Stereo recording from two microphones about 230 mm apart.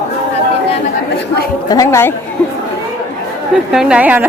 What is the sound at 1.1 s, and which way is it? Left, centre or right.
Speech, left.